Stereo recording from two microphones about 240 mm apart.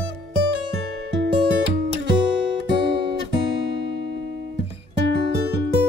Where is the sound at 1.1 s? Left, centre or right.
Right.